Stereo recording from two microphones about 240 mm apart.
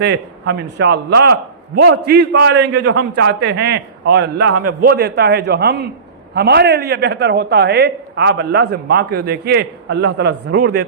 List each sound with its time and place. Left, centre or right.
0.0 s a woman's voice: right